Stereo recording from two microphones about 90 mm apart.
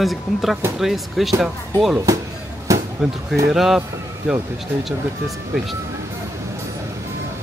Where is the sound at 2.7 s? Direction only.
35° right (ahead or behind).